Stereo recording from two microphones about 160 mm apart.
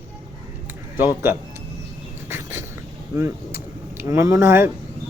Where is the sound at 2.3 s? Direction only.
15° right (ahead or behind).